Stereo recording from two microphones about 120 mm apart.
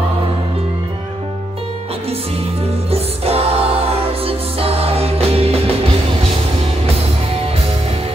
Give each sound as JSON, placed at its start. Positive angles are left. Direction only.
{"t": 2.9, "sound": "music", "side_deg": -55}